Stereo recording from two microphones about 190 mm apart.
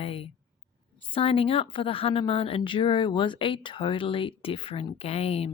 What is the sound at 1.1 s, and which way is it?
Speech, 30° left (ahead or behind).